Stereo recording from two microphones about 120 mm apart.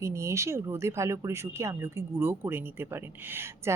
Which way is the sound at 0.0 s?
25° right (ahead or behind).